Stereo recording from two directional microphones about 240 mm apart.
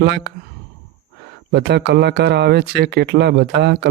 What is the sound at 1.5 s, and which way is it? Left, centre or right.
Speech, right.